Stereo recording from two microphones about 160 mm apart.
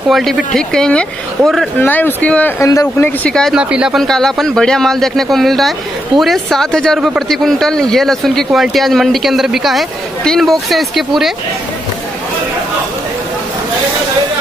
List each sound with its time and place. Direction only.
0.1 s speech: centre (ahead or behind)
1.8 s speech: 10° left (ahead or behind)
2.6 s speech: 20° left (ahead or behind)
3.3 s speech: 5° left (ahead or behind)